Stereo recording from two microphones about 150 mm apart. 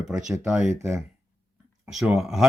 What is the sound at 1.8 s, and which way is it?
Speech, 5° right (ahead or behind).